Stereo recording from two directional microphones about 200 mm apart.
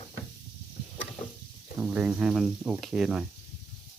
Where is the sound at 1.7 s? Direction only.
5° right (ahead or behind).